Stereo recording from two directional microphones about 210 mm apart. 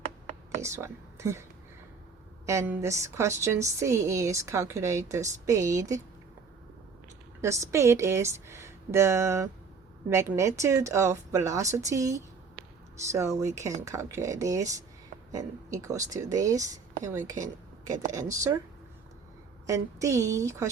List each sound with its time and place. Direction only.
0.6 s speech: 15° right (ahead or behind)
2.5 s a woman's voice: 15° right (ahead or behind)
7.4 s a woman's voice: 15° right (ahead or behind)
12.5 s a sound: 15° right (ahead or behind)
13.6 s a woman's voice: 15° right (ahead or behind)
19.6 s a woman's voice: 15° right (ahead or behind)